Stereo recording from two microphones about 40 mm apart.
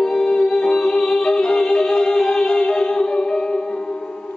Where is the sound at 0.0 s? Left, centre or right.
Centre.